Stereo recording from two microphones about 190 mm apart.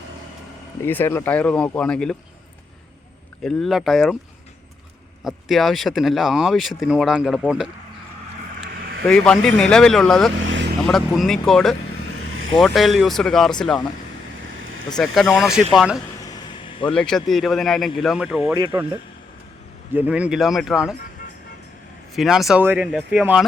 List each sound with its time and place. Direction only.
0.8 s speech: 10° left (ahead or behind)
3.4 s speech: centre (ahead or behind)
5.2 s speech: centre (ahead or behind)
9.0 s speech: 5° left (ahead or behind)
10.4 s vehicle: 80° right
10.8 s speech: centre (ahead or behind)
14.9 s speech: centre (ahead or behind)
16.2 s a sound: 20° left (ahead or behind)
16.9 s speech: 5° left (ahead or behind)
18.4 s speech: 20° right (ahead or behind)
19.9 s speech: 10° right (ahead or behind)
22.1 s speech: centre (ahead or behind)